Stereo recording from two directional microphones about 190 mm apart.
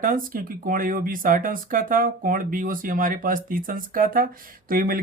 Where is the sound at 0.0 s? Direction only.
45° right (ahead or behind).